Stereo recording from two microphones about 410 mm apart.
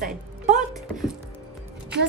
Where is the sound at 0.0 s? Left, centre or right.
Centre.